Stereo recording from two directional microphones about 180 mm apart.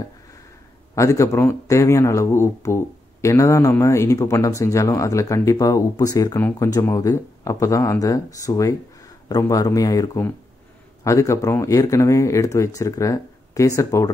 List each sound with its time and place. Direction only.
0.9 s speech: 15° left (ahead or behind)